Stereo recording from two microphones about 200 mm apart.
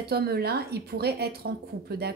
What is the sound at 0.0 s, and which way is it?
Speech, 50° right (ahead or behind).